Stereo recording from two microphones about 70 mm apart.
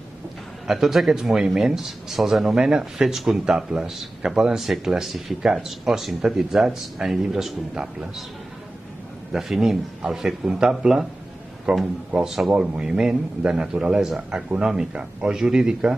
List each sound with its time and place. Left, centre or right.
0.7 s speech: centre
9.3 s speech: centre
12.5 s speech: centre